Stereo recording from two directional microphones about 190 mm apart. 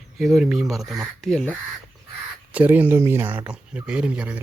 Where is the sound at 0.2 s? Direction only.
Centre (ahead or behind).